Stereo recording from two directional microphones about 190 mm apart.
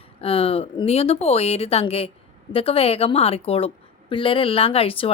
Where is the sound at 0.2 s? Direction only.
30° left (ahead or behind).